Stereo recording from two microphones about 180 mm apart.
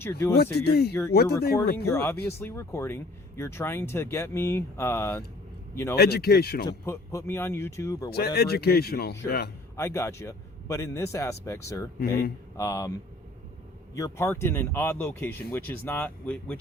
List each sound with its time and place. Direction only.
0.0 s speech: 15° left (ahead or behind)
0.5 s speech: 60° left (ahead or behind)
1.9 s a man's voice: 15° left (ahead or behind)
6.0 s speech: 60° left (ahead or behind)
6.7 s speech: 15° left (ahead or behind)
8.1 s speech: 60° left (ahead or behind)
9.7 s speech: 15° left (ahead or behind)
13.9 s speech: 15° left (ahead or behind)